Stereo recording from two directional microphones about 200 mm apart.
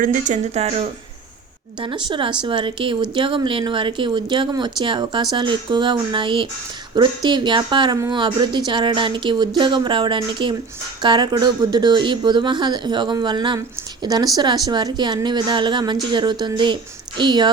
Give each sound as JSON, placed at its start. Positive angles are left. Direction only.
{"t": 0.0, "sound": "speech", "side_deg": -40}